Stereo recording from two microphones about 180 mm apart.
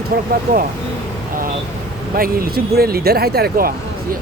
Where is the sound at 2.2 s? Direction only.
55° right (ahead or behind).